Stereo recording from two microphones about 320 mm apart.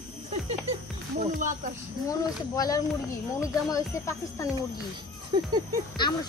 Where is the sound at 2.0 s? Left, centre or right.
Centre.